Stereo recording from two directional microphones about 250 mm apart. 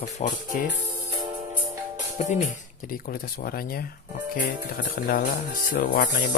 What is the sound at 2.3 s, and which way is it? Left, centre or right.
Speech, left.